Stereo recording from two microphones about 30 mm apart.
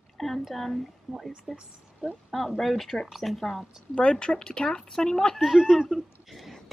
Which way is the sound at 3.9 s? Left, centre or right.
Left.